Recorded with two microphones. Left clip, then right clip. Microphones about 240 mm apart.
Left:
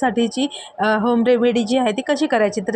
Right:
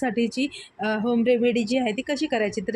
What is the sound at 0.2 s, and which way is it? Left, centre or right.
Speech, centre.